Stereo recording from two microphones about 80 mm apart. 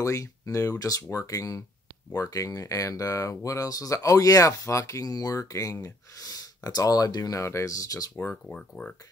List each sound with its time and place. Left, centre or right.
0.0 s speech: left
8.2 s speech: left
8.5 s speech: centre